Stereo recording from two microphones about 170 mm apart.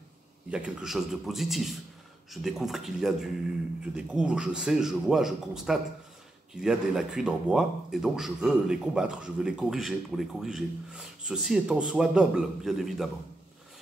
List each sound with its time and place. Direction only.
0.5 s speech: 5° right (ahead or behind)